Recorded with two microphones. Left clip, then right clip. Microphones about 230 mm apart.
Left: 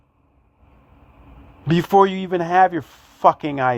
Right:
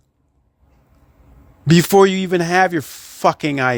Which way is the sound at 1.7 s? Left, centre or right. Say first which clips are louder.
Right 3 dB; right.